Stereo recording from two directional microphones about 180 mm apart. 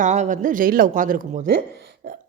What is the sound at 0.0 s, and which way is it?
A woman's voice, 45° right (ahead or behind).